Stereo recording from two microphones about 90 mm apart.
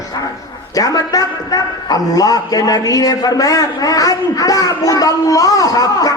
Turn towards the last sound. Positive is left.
turn(degrees=45)  # may be behind; listen again after turning